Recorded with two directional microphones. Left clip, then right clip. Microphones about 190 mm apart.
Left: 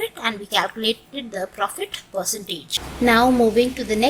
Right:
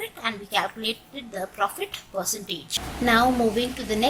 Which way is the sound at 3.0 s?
25° left (ahead or behind).